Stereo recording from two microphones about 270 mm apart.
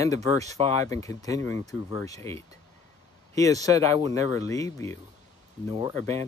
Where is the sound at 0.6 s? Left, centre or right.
Right.